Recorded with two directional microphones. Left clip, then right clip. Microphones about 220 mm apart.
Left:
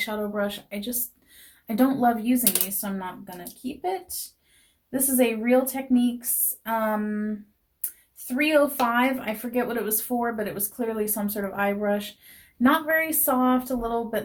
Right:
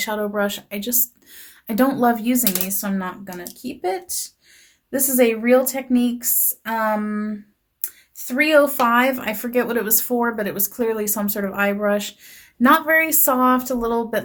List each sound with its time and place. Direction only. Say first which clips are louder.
0.0 s speech: right 5 dB; 45° right (ahead or behind)
8.3 s speech: right 6 dB; 45° right (ahead or behind)